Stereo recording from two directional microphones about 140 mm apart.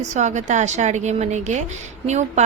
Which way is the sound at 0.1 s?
60° right (ahead or behind).